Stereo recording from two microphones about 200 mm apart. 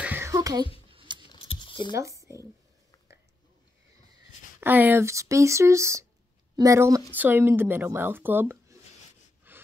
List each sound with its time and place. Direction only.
0.0 s a sound: 10° right (ahead or behind)
0.9 s typing: 25° right (ahead or behind)
1.2 s scissors: 25° left (ahead or behind)
2.0 s speech: 15° right (ahead or behind)
4.6 s speech: 10° right (ahead or behind)
9.5 s breathing: 10° right (ahead or behind)